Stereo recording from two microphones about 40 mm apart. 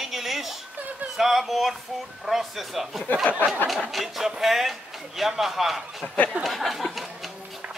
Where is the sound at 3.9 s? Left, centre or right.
Centre.